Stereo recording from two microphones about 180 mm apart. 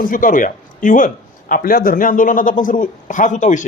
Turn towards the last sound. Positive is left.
turn(degrees=45)  # may be behind; listen again after turning